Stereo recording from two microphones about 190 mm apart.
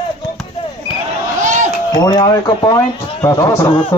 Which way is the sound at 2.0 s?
20° left (ahead or behind).